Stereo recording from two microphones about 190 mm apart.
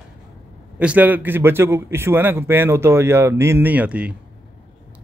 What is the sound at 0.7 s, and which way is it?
A man's voice, 10° right (ahead or behind).